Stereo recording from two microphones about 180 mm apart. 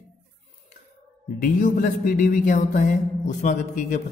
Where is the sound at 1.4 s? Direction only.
50° left (ahead or behind).